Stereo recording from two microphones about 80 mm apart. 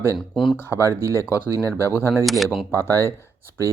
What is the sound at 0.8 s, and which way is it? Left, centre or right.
Speech, right.